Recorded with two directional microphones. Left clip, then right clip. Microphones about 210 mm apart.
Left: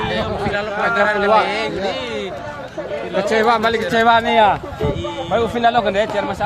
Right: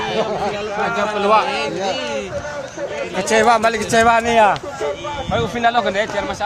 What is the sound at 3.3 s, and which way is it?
A man's voice, 45° right (ahead or behind).